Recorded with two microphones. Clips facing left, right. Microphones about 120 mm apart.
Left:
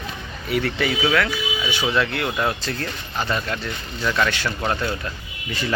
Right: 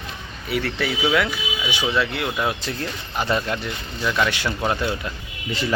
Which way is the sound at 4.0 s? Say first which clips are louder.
Even; 10° right (ahead or behind).